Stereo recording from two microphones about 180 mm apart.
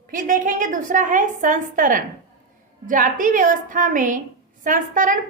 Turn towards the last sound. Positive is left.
turn(degrees=-50)  # may be behind; listen again after turning